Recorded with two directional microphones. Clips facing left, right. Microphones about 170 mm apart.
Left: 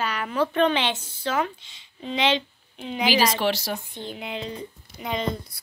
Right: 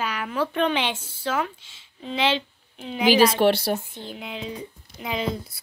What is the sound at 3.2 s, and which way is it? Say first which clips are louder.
Speech: right 5 dB; 55° right (ahead or behind).